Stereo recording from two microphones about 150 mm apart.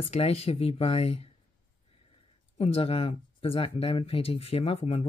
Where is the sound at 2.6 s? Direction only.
40° left (ahead or behind).